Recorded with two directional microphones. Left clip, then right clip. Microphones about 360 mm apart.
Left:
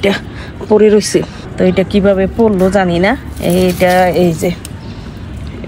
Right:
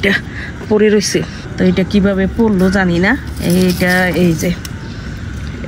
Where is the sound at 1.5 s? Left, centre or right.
Left.